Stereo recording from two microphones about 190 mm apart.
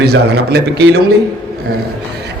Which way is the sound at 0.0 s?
60° right (ahead or behind).